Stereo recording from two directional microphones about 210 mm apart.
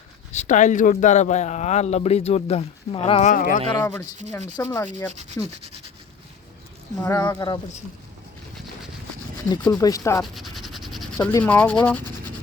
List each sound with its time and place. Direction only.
0.3 s speech: 35° left (ahead or behind)
3.7 s speech: 15° left (ahead or behind)
7.0 s speech: 10° left (ahead or behind)
7.3 s speech: 20° left (ahead or behind)
8.5 s a sound: centre (ahead or behind)
9.5 s speech: 20° left (ahead or behind)
10.3 s a sound: centre (ahead or behind)
11.3 s speech: 10° left (ahead or behind)